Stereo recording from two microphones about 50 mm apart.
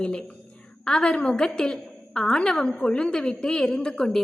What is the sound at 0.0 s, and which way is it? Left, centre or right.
A woman's voice, centre.